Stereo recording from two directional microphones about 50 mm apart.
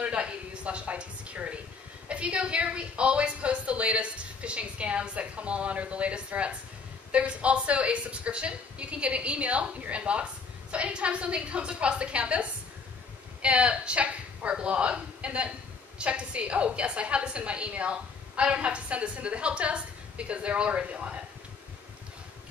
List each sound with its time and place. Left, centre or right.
0.0 s a woman's voice: right